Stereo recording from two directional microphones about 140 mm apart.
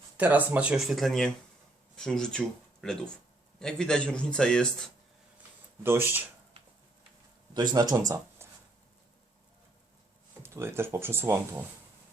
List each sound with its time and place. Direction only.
0.2 s a man's voice: 10° right (ahead or behind); by 4.9 s 5° left (ahead or behind)
5.8 s speech: 15° right (ahead or behind)
7.7 s speech: 30° right (ahead or behind)
10.4 s speech: 20° right (ahead or behind)